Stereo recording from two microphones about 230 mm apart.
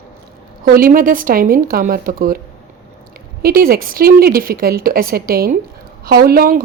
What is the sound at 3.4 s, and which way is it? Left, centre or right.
Speech, right.